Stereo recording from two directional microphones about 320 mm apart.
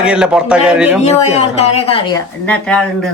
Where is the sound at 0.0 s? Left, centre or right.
Centre.